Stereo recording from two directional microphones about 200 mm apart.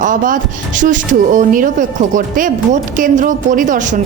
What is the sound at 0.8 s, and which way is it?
A woman's voice, 40° right (ahead or behind).